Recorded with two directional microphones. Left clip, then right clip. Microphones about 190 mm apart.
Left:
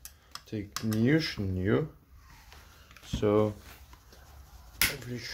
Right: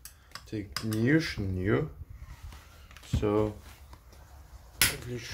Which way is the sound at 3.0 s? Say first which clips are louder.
Left 2 dB; 20° left (ahead or behind).